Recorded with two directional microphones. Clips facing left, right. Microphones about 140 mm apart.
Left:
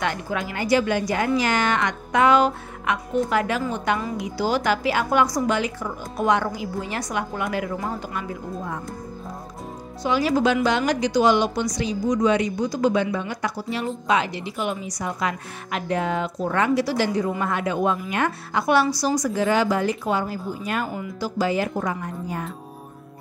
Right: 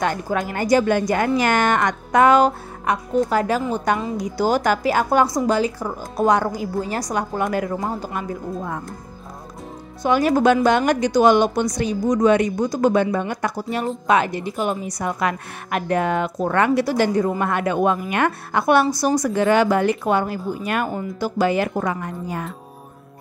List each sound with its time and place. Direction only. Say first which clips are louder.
0.0 s a woman's voice: right 4 dB; 45° right (ahead or behind)
5.2 s a woman's voice: right 3 dB; 30° right (ahead or behind); by 8.8 s 50° right (ahead or behind)
10.0 s a woman's voice: right 4 dB; 50° right (ahead or behind); by 22.5 s 75° right (ahead or behind)